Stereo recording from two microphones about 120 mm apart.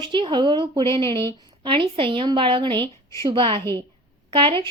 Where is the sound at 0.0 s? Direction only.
40° right (ahead or behind).